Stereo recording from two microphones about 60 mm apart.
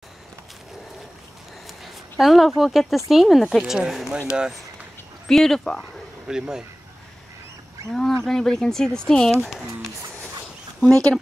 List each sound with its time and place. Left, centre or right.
1.7 s speech: centre
5.3 s speech: centre
5.8 s speech: centre
7.9 s speech: centre
10.9 s speech: centre